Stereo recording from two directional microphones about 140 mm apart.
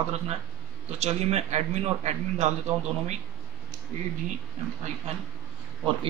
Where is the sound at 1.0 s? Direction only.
50° right (ahead or behind).